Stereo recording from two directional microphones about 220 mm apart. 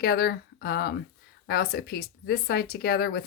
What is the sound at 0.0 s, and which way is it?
Speech, 45° left (ahead or behind).